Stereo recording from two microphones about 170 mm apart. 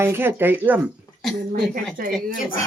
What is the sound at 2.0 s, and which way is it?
Speech, 60° right (ahead or behind).